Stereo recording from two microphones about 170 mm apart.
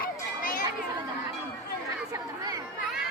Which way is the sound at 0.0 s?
60° left (ahead or behind).